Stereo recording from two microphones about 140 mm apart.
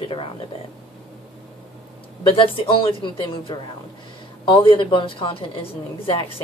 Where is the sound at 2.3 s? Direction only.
40° left (ahead or behind).